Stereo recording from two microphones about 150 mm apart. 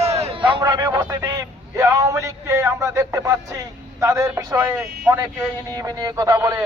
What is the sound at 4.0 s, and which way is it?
Speech, 20° right (ahead or behind).